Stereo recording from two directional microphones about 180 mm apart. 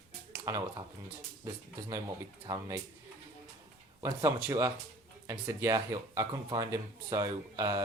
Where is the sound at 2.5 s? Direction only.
15° right (ahead or behind).